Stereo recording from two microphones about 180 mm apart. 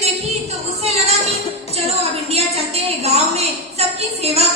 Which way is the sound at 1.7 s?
35° right (ahead or behind).